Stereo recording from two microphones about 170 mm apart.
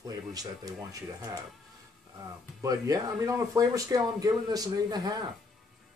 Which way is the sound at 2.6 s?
20° right (ahead or behind).